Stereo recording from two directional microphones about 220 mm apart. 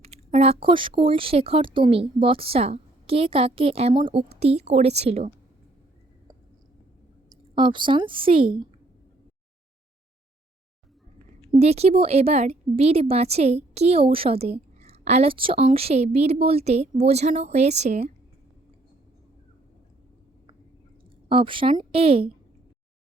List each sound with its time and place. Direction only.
0.0 s speech: 30° right (ahead or behind)
7.3 s speech: 20° right (ahead or behind)
11.6 s speech: 30° right (ahead or behind)
21.2 s speech: 25° right (ahead or behind)